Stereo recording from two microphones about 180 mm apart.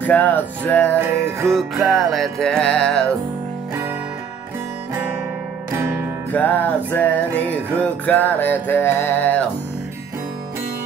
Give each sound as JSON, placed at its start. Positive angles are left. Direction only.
{"t": 0.0, "sound": "music", "side_deg": 10}
{"t": 6.3, "sound": "music", "side_deg": 10}